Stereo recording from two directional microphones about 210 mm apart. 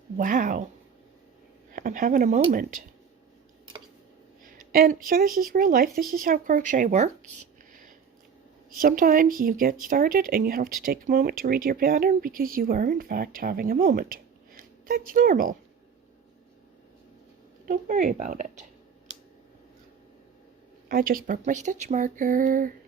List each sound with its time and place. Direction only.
0.2 s speech: 40° right (ahead or behind)
1.7 s speech: 40° right (ahead or behind)
4.4 s speech: 45° right (ahead or behind)
8.8 s speech: 40° right (ahead or behind)
17.7 s speech: 40° right (ahead or behind)
20.8 s speech: 45° right (ahead or behind)